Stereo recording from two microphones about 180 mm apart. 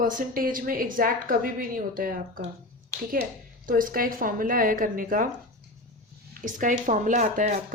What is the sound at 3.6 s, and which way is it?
A woman's voice, 50° right (ahead or behind).